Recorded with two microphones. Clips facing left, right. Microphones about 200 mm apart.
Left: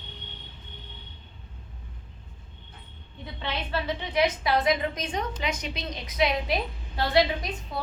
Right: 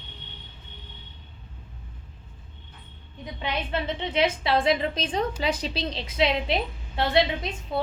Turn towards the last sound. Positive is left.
turn(degrees=-25)  # may be behind; listen again after turning